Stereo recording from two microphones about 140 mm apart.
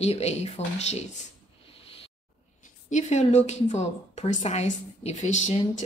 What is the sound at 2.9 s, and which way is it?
A woman's voice, 55° left (ahead or behind).